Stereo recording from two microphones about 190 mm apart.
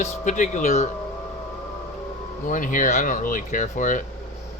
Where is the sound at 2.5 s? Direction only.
45° left (ahead or behind).